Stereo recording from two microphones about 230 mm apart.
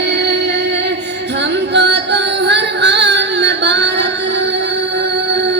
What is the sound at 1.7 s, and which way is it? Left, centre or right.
Music, right.